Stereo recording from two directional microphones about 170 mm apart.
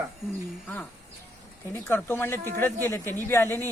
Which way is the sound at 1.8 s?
10° left (ahead or behind).